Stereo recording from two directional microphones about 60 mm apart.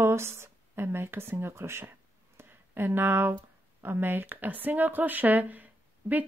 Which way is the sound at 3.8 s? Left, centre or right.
Right.